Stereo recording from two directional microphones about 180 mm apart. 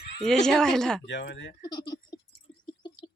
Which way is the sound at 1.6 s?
20° left (ahead or behind).